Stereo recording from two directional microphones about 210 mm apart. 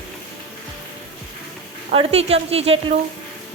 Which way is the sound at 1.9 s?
30° right (ahead or behind).